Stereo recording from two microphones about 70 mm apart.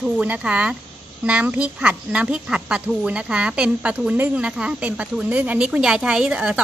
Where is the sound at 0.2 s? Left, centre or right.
Centre.